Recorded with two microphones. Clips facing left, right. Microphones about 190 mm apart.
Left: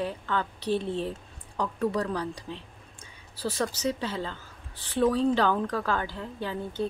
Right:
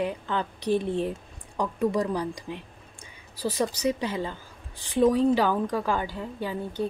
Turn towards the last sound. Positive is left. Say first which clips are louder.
# right 1 dB
turn(degrees=-10)  # may be behind; listen again after turning